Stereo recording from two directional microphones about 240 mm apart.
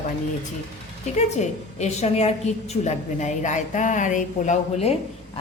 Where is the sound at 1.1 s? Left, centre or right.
Left.